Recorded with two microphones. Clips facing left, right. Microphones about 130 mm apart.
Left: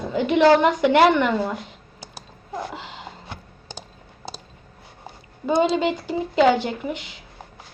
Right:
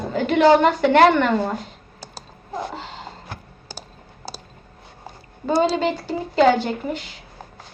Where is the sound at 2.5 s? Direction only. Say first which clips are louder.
Right 2 dB; 25° right (ahead or behind).